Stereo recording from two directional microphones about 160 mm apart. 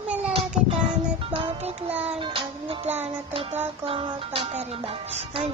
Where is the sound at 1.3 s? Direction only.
40° right (ahead or behind).